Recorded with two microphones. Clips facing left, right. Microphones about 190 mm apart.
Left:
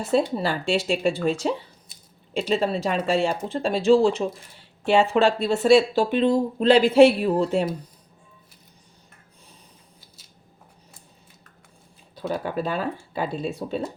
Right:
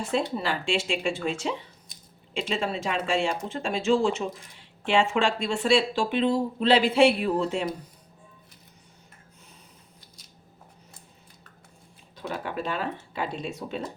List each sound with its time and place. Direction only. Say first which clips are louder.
0.1 s speech: left 6 dB; 40° left (ahead or behind)
12.1 s speech: left 5 dB; 35° left (ahead or behind)